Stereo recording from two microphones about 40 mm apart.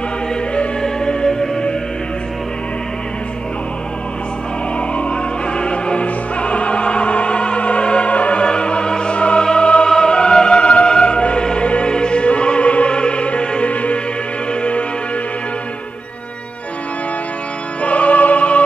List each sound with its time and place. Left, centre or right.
0.8 s music: centre
4.7 s music: left
17.8 s music: left